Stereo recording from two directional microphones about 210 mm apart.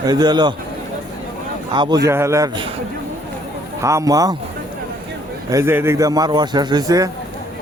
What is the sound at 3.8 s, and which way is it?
Speech, 15° right (ahead or behind).